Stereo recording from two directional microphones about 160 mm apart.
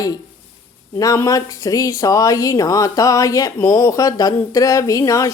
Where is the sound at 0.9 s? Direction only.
20° left (ahead or behind).